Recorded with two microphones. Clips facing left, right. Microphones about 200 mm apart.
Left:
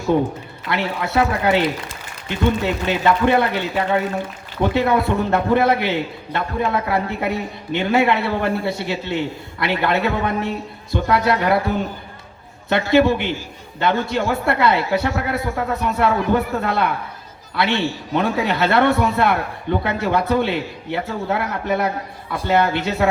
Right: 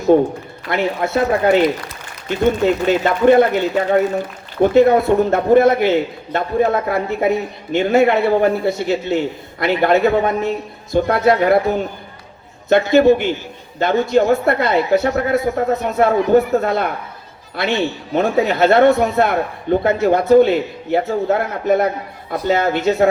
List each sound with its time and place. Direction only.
0.7 s a man's voice: 50° right (ahead or behind)
13.7 s a man's voice: 45° right (ahead or behind)